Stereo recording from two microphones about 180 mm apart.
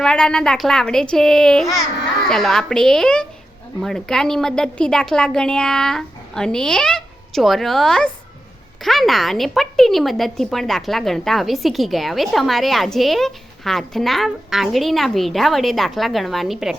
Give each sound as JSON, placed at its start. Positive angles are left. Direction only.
{"t": 0.0, "sound": "a woman's voice", "side_deg": 5}